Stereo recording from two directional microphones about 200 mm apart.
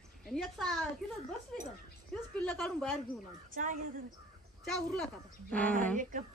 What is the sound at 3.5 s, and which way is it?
Speech, 40° right (ahead or behind).